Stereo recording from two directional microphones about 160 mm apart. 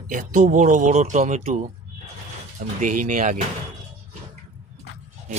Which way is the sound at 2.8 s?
55° right (ahead or behind).